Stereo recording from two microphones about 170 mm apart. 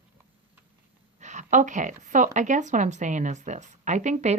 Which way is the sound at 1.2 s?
45° right (ahead or behind).